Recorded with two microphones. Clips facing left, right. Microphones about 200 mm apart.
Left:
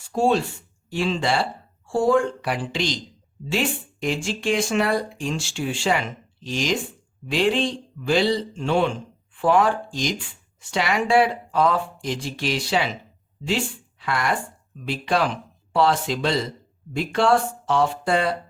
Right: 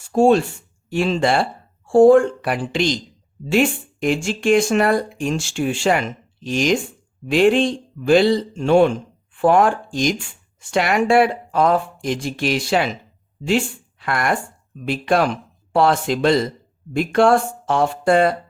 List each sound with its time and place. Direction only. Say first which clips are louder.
0.1 s speech: right 6 dB; 50° right (ahead or behind)
14.0 s speech: right 3 dB; 50° right (ahead or behind)